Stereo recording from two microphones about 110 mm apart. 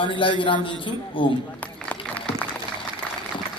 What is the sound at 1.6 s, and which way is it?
Run, 10° left (ahead or behind).